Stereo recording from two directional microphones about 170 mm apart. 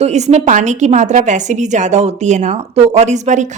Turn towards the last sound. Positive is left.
turn(degrees=-45)  # may be behind; listen again after turning